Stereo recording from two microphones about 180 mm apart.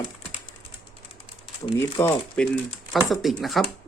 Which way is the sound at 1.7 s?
15° left (ahead or behind).